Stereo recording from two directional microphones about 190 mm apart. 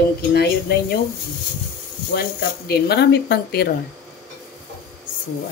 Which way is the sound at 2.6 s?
60° left (ahead or behind).